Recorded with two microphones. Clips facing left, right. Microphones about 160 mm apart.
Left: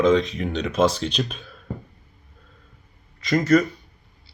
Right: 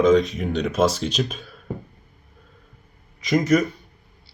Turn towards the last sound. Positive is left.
turn(degrees=-15)  # may be behind; listen again after turning